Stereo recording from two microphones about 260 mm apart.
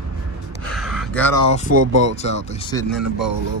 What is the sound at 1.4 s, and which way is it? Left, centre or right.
Speech, left.